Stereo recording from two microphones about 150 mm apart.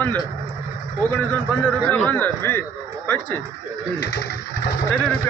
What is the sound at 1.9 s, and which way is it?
Speech, 10° left (ahead or behind).